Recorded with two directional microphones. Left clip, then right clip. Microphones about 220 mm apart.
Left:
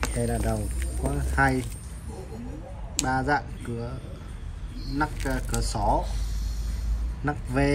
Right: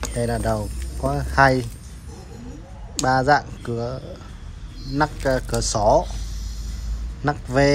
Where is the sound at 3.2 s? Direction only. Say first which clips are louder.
Right 8 dB; 15° right (ahead or behind).